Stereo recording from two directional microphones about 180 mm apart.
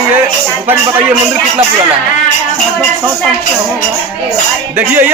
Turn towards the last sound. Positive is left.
turn(degrees=-10)  # may be behind; listen again after turning